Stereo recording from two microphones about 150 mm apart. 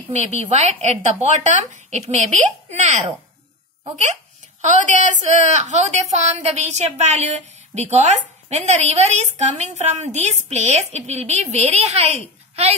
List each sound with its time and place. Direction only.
0.1 s a woman's voice: 50° right (ahead or behind)